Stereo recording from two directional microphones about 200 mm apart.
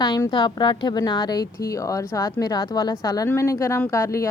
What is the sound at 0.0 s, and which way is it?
Speech, 20° left (ahead or behind).